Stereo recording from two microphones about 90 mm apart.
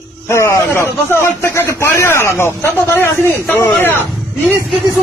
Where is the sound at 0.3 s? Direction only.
30° left (ahead or behind).